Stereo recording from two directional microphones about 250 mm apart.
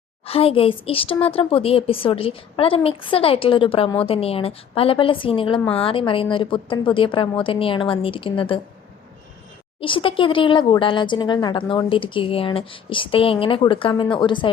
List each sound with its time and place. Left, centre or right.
0.3 s a woman's voice: left
9.8 s a woman's voice: left